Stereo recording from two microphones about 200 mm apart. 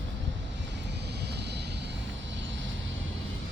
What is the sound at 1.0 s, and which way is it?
Vehicle, 55° right (ahead or behind).